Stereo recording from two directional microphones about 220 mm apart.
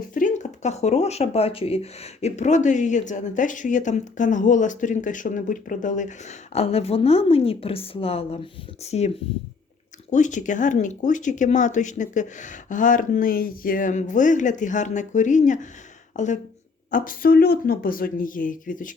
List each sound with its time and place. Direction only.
0.1 s speech: 35° left (ahead or behind)